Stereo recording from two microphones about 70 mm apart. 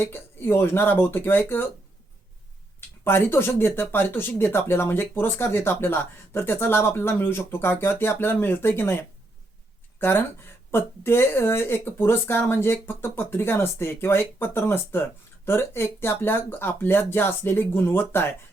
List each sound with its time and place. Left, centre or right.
0.0 s speech: left
3.0 s speech: left